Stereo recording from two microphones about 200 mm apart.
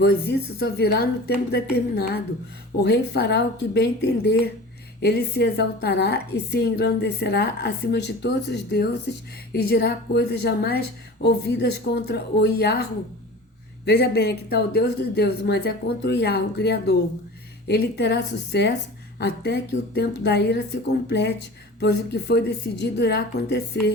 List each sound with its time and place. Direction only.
0.0 s a woman's voice: 55° left (ahead or behind)